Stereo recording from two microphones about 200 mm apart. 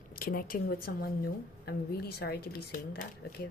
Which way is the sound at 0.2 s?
45° left (ahead or behind).